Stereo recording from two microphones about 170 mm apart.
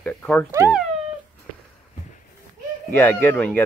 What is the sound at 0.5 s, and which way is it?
Speech, 15° right (ahead or behind).